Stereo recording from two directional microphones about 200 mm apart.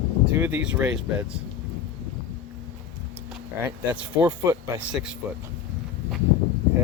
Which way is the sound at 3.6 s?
10° right (ahead or behind).